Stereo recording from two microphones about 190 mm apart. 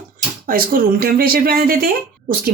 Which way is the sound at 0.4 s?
50° right (ahead or behind).